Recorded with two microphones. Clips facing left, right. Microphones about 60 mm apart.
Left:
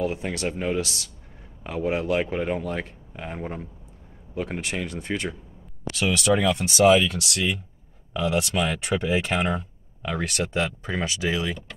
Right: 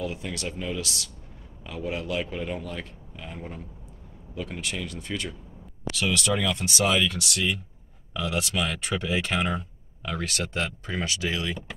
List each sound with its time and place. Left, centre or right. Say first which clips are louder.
0.0 s speech: left 5 dB; left; by 11.5 s centre